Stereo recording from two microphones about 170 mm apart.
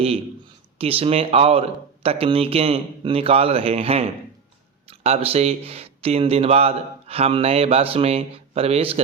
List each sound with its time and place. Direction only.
0.8 s speech: 35° right (ahead or behind)